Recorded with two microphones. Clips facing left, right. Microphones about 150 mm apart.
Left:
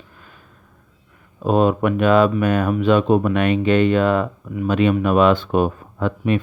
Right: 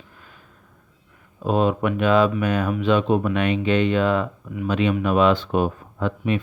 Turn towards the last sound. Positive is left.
turn(degrees=55)  # may be behind; listen again after turning